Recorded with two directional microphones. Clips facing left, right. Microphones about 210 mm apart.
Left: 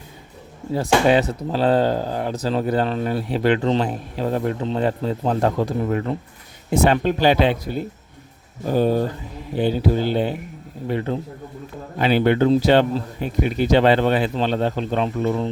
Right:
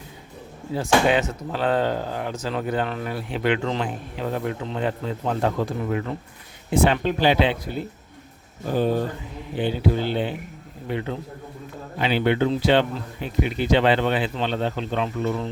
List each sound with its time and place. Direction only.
0.8 s speech: 35° left (ahead or behind)
8.7 s speech: 40° left (ahead or behind)